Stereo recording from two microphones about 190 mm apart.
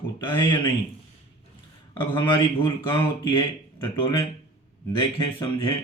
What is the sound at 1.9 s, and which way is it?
Speech, 25° left (ahead or behind).